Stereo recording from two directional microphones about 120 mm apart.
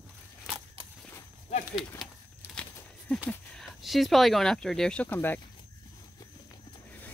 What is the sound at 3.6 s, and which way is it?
Speech, centre (ahead or behind).